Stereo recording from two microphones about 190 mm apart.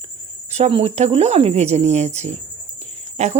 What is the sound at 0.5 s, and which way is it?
Speech, 30° right (ahead or behind).